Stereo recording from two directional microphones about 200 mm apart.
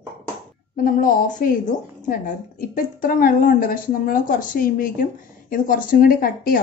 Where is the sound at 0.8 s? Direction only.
45° left (ahead or behind).